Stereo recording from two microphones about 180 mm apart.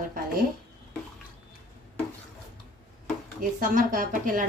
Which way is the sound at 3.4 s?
50° right (ahead or behind).